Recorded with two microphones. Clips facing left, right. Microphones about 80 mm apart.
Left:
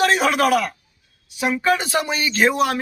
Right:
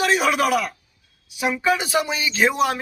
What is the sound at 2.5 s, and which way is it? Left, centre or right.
Speech, right.